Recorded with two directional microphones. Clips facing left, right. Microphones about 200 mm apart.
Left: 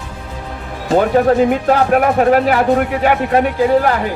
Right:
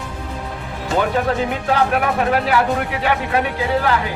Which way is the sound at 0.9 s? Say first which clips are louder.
Left 7 dB; 40° left (ahead or behind).